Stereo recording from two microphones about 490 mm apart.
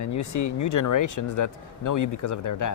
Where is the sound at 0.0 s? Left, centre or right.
Left.